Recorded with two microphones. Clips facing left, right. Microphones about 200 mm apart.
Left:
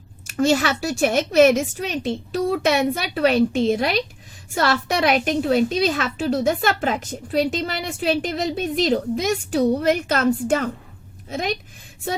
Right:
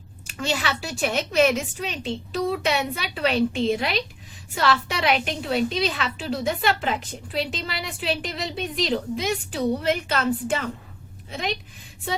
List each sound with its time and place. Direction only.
0.3 s a woman's voice: 45° left (ahead or behind)